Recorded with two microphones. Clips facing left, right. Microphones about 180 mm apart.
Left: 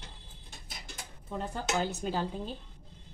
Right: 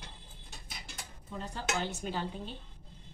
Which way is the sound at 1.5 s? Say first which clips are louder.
Left 3 dB; 45° left (ahead or behind).